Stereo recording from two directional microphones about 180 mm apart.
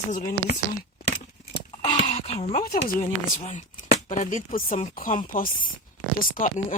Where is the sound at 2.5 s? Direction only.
55° left (ahead or behind).